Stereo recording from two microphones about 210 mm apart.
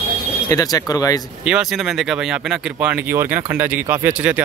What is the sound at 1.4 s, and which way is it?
Speech, 5° right (ahead or behind).